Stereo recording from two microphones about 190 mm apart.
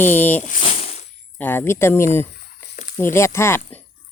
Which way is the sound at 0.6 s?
35° left (ahead or behind).